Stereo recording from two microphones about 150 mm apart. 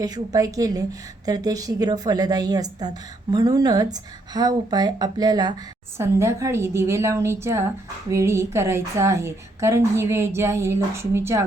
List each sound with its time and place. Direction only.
0.0 s a woman's voice: 25° right (ahead or behind)